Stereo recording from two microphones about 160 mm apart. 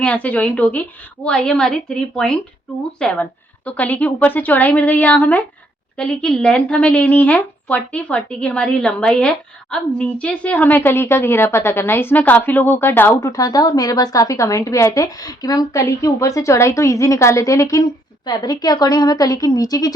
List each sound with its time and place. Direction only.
0.0 s a woman's voice: 10° left (ahead or behind)